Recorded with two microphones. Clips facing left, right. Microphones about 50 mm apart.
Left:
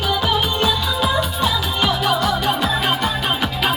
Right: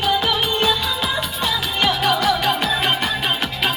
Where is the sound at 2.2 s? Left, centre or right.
Right.